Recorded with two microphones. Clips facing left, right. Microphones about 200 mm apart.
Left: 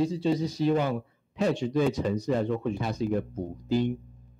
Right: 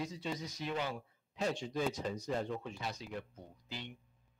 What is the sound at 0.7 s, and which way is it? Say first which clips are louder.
Speech: left 12 dB; 60° left (ahead or behind).